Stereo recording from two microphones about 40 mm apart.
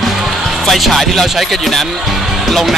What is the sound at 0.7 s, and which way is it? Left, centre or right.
Speech, centre.